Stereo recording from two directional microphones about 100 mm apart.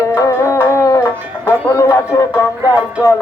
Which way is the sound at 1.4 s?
30° left (ahead or behind).